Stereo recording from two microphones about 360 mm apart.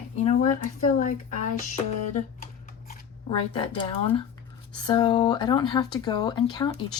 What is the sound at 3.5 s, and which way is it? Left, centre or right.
Speech, centre.